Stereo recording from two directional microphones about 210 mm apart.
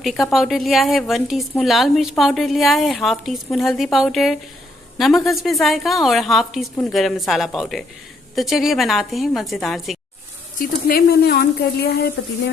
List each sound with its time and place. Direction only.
0.0 s speech: centre (ahead or behind)
10.6 s speech: 45° left (ahead or behind)